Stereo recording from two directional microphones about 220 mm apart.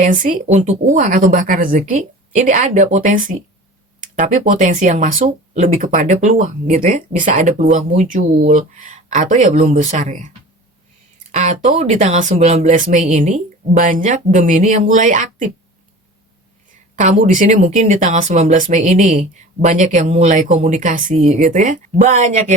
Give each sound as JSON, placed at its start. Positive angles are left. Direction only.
{"t": 0.0, "sound": "speech", "side_deg": -35}
{"t": 16.9, "sound": "speech", "side_deg": -35}